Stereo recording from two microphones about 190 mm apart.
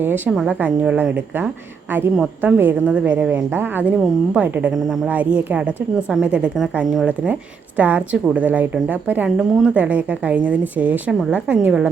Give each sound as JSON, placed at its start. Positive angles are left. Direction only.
{"t": 0.0, "sound": "a woman's voice", "side_deg": -10}